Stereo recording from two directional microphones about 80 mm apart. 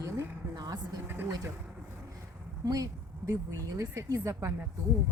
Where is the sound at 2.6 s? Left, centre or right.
Right.